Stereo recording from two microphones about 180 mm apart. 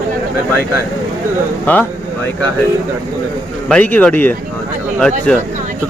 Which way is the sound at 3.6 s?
5° left (ahead or behind).